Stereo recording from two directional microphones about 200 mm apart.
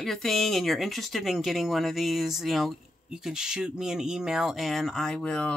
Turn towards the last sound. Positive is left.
turn(degrees=5)  # may be behind; listen again after turning